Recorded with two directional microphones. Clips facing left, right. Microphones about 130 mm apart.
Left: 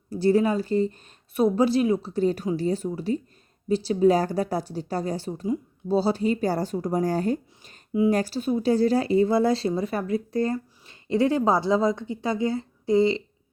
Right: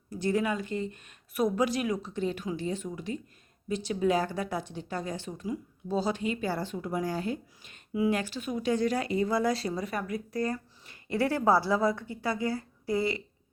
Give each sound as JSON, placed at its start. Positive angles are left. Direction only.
{"t": 0.1, "sound": "speech", "side_deg": 35}